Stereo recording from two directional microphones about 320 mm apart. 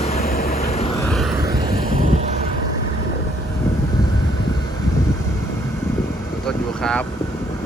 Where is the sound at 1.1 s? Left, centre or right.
Centre.